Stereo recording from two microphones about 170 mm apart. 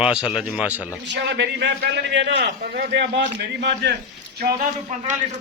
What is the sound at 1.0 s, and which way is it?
A man's voice, 90° right.